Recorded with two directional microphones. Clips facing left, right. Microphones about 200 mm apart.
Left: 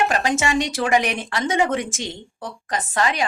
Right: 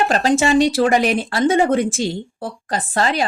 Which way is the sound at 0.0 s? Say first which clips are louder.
Right 4 dB; 35° right (ahead or behind).